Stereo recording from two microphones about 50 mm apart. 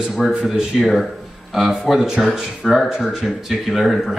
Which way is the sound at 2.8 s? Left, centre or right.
Centre.